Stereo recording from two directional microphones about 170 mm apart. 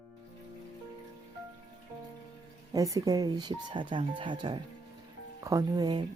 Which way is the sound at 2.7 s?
20° right (ahead or behind).